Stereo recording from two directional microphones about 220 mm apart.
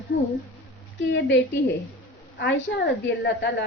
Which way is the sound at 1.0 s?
55° left (ahead or behind).